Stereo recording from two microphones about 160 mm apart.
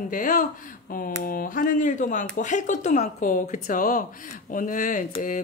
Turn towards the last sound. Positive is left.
turn(degrees=55)  # may be behind; listen again after turning